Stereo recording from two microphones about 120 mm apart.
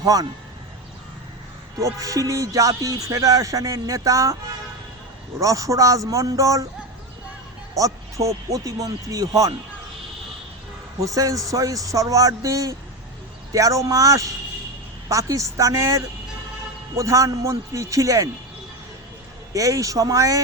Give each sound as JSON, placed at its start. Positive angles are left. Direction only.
{"t": 0.0, "sound": "music", "side_deg": -30}
{"t": 1.8, "sound": "music", "side_deg": -30}
{"t": 5.4, "sound": "music", "side_deg": -30}
{"t": 7.8, "sound": "music", "side_deg": -25}
{"t": 11.0, "sound": "music", "side_deg": -30}
{"t": 19.5, "sound": "music", "side_deg": -30}